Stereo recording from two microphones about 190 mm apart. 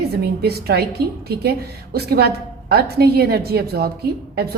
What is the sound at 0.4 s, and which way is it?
A woman's voice, 55° right (ahead or behind).